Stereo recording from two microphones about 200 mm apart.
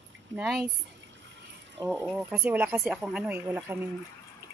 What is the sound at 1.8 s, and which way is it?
Speech, 10° right (ahead or behind).